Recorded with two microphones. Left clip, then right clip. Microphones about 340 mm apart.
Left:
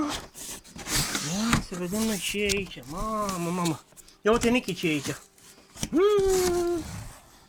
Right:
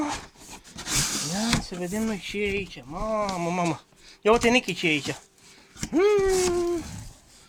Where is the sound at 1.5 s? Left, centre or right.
Centre.